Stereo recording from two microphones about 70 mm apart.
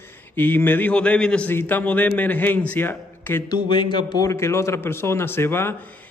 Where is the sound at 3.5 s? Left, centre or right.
Left.